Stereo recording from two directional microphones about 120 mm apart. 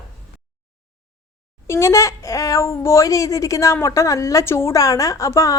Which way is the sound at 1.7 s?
25° left (ahead or behind).